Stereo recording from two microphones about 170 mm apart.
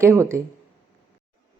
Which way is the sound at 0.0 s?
15° right (ahead or behind).